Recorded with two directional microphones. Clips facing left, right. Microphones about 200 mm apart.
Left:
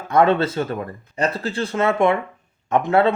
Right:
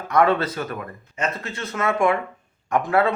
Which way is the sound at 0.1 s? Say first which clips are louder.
Left 3 dB; 25° left (ahead or behind).